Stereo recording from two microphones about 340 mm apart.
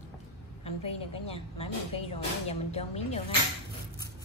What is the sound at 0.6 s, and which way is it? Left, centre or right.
Speech, centre.